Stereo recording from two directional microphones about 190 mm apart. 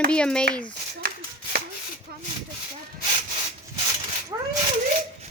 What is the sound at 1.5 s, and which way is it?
Chopping, 55° right (ahead or behind).